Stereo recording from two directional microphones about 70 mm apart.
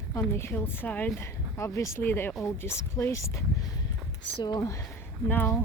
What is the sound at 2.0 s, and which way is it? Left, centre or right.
A woman's voice, left.